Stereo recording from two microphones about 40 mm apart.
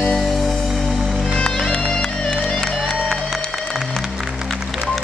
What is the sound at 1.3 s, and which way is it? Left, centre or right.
Music, left.